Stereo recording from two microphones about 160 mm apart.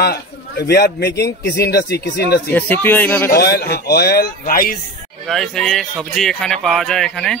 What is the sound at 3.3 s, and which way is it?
Speech, 80° left.